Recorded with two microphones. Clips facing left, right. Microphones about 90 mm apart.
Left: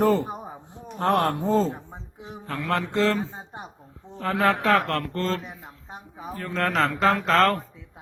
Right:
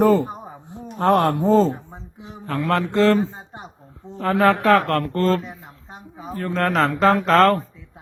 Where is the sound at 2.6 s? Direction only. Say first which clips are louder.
Right 6 dB; 65° right (ahead or behind).